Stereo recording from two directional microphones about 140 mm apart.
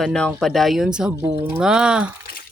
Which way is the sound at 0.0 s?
5° left (ahead or behind).